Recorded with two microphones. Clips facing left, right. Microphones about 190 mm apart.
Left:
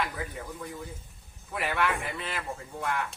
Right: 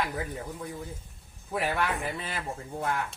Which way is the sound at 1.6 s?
40° right (ahead or behind).